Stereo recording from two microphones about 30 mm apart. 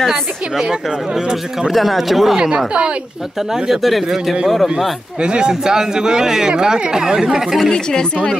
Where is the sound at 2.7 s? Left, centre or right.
Right.